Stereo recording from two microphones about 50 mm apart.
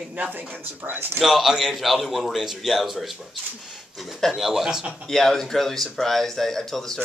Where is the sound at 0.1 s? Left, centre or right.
Right.